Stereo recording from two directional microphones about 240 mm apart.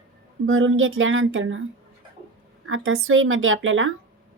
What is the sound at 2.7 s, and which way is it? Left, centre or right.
A woman's voice, right.